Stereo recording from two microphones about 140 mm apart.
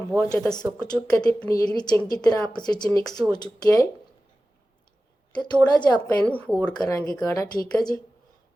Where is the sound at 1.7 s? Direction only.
30° left (ahead or behind).